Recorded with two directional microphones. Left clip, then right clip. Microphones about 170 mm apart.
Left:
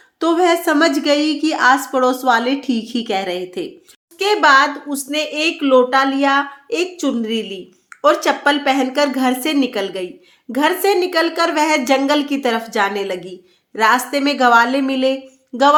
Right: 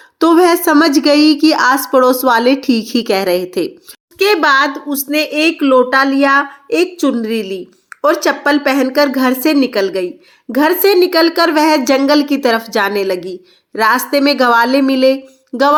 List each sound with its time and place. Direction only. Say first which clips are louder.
0.2 s a woman's voice: right 5 dB; 35° right (ahead or behind)